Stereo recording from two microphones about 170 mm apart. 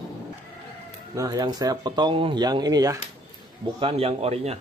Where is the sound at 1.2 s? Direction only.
25° right (ahead or behind).